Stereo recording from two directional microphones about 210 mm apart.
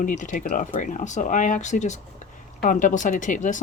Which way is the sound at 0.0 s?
40° left (ahead or behind).